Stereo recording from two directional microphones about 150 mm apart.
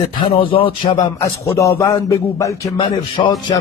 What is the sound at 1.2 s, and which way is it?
Speech, 20° left (ahead or behind).